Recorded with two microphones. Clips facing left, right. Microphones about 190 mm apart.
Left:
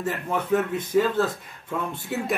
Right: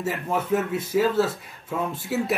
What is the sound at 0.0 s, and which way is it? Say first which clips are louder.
Speech: right 1 dB; 5° right (ahead or behind).